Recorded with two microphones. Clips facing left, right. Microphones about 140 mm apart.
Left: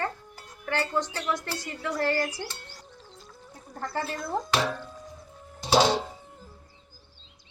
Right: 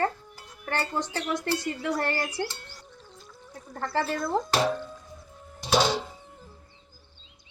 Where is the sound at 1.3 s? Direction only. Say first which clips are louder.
Right 6 dB; 55° right (ahead or behind).